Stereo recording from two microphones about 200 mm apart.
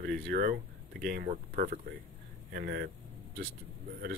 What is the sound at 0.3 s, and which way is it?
Speech, 50° right (ahead or behind).